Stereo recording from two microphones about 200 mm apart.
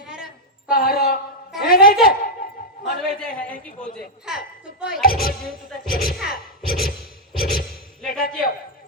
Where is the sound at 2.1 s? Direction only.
45° left (ahead or behind).